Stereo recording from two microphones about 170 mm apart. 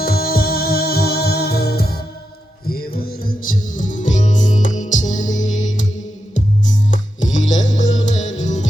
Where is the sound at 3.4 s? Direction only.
50° left (ahead or behind).